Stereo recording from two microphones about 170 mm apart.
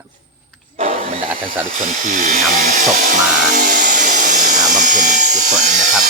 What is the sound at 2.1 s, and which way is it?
Speech, 50° right (ahead or behind).